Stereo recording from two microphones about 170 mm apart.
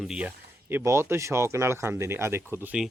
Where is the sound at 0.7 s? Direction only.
15° right (ahead or behind).